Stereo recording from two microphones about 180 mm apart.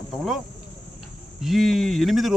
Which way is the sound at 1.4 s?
Centre (ahead or behind).